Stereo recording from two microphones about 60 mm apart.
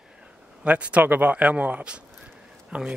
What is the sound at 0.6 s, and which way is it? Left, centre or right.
Speech, right.